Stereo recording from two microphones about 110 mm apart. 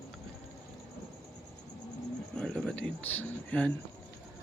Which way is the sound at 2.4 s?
5° left (ahead or behind).